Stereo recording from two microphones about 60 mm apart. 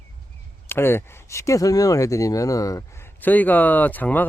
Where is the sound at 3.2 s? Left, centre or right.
Left.